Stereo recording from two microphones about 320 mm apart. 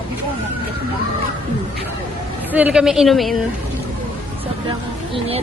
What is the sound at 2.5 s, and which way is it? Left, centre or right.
Speech, centre.